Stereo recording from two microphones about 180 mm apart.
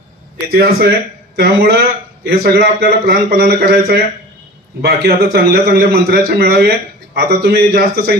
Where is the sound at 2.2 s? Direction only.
60° right (ahead or behind).